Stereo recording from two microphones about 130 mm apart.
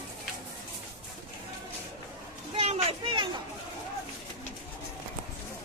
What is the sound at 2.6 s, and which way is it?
Children playing, 55° right (ahead or behind).